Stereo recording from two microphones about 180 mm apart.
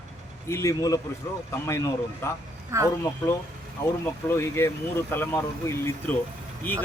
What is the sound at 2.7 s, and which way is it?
Speech, 15° right (ahead or behind).